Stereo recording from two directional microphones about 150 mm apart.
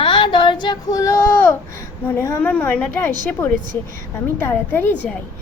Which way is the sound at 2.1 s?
15° left (ahead or behind).